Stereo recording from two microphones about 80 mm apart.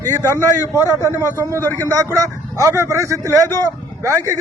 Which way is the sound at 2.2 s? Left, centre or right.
Right.